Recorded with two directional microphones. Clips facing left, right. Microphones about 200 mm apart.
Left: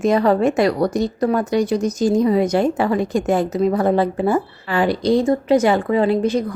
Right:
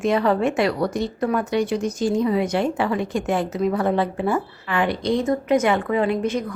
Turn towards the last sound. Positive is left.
turn(degrees=35)  # may be behind; listen again after turning